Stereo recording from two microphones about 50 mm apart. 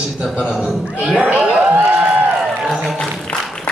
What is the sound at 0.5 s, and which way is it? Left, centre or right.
Speech, centre.